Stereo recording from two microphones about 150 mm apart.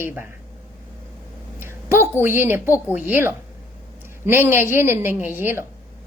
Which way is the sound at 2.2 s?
15° right (ahead or behind).